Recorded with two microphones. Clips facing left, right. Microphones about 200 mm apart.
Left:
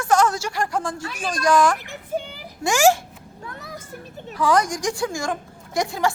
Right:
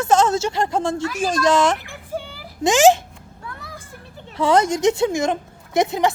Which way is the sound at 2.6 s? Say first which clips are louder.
Right 4 dB; 20° right (ahead or behind).